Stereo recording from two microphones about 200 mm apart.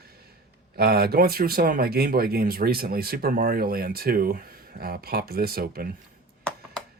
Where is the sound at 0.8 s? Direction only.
50° right (ahead or behind).